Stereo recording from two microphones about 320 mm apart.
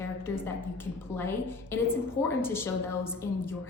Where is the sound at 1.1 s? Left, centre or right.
Centre.